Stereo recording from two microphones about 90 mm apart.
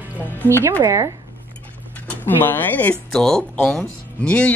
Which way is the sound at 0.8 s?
35° right (ahead or behind).